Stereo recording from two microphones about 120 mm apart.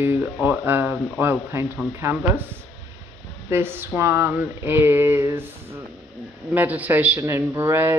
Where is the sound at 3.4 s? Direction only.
20° right (ahead or behind).